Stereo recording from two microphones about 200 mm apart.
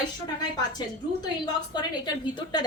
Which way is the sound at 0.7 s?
20° left (ahead or behind).